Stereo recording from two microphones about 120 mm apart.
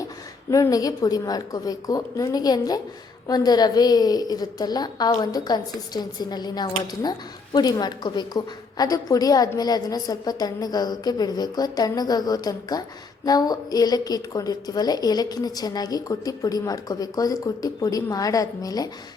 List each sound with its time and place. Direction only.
0.5 s a woman's voice: 30° left (ahead or behind)